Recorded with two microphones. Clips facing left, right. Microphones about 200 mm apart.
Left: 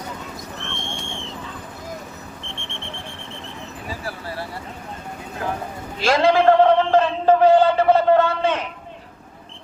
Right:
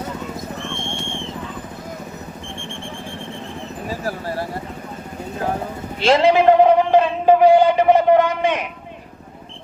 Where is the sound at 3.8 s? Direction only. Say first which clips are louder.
Right 6 dB; 40° right (ahead or behind).